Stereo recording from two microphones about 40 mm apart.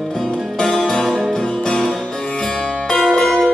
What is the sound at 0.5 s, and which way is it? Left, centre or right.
Music, centre.